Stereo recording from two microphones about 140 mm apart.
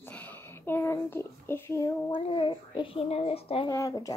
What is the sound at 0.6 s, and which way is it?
A child's voice, 15° left (ahead or behind).